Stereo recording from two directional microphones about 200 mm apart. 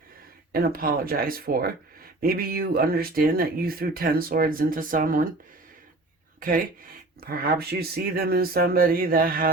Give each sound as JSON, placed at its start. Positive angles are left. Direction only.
{"t": 0.5, "sound": "speech", "side_deg": -45}
{"t": 7.2, "sound": "speech", "side_deg": -50}